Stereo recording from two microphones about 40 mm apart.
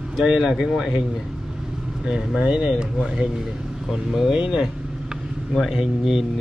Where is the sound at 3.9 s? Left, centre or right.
Centre.